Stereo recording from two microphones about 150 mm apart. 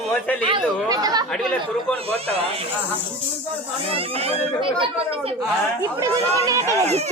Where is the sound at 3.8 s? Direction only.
40° right (ahead or behind).